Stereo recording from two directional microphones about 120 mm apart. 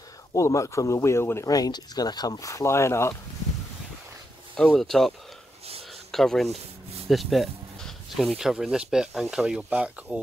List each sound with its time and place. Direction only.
0.3 s speech: 25° left (ahead or behind)
4.7 s speech: 5° left (ahead or behind)
6.1 s speech: 5° left (ahead or behind)